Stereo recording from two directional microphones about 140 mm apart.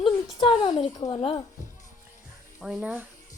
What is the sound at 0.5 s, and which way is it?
Speech, 45° left (ahead or behind).